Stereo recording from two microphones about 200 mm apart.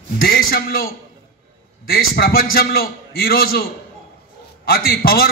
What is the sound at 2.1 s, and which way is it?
A man's voice, 50° left (ahead or behind).